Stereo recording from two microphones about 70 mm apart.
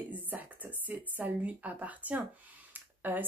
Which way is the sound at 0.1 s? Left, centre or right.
Right.